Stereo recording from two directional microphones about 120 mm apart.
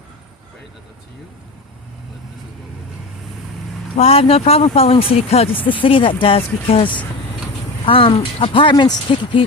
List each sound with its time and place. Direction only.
3.9 s speech: 55° left (ahead or behind)
5.5 s speech: 15° left (ahead or behind)
5.8 s speech: 45° left (ahead or behind)
8.7 s speech: 35° left (ahead or behind)